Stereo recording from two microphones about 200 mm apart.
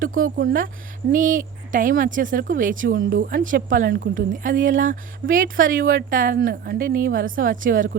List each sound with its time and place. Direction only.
0.2 s a woman's voice: 45° right (ahead or behind)